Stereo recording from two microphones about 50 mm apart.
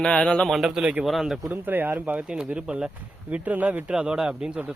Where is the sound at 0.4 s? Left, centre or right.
Centre.